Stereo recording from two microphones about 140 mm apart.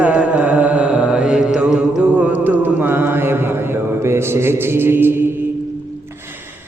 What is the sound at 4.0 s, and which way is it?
Mantra, 20° right (ahead or behind).